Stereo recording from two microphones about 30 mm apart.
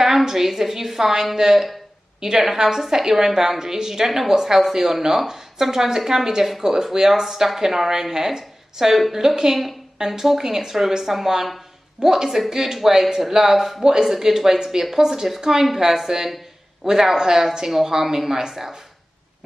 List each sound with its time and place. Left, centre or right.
0.3 s a woman's voice: centre
13.0 s speech: centre
13.8 s speech: right